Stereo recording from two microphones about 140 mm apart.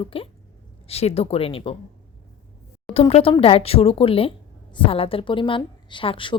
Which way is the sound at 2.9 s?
45° left (ahead or behind).